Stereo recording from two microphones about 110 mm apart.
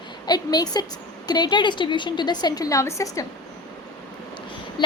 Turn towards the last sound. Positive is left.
turn(degrees=40)  # may be behind; listen again after turning